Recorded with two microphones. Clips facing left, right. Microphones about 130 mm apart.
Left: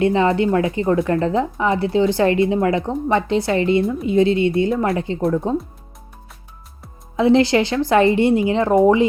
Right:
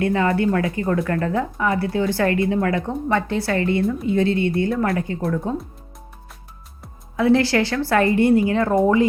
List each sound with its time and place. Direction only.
0.0 s speech: 20° left (ahead or behind)
7.2 s speech: 20° left (ahead or behind)